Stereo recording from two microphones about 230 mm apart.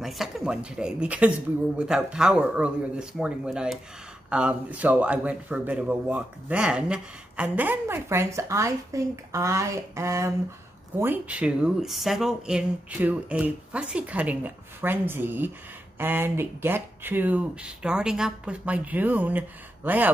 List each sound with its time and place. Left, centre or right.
0.0 s speech: centre